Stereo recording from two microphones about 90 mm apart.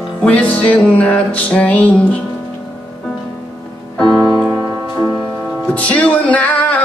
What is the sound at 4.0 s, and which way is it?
Music, 5° left (ahead or behind).